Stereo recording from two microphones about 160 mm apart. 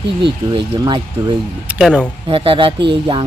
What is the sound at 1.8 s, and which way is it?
Speech, 5° left (ahead or behind).